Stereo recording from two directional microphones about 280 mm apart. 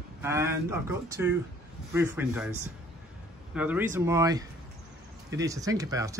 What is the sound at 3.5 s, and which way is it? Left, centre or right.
Speech, centre.